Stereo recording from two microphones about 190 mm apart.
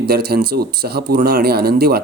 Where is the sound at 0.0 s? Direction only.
55° right (ahead or behind).